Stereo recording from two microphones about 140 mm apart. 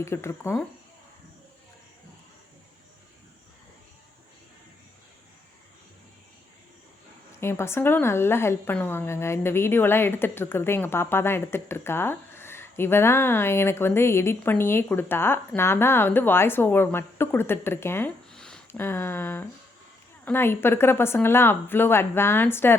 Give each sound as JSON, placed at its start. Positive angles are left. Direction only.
{"t": 0.0, "sound": "speech", "side_deg": 20}
{"t": 7.4, "sound": "a woman's voice", "side_deg": 20}
{"t": 18.3, "sound": "a sound", "side_deg": 5}
{"t": 18.7, "sound": "a woman's voice", "side_deg": 15}